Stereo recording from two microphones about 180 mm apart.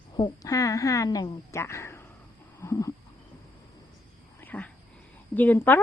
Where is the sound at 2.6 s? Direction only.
15° left (ahead or behind).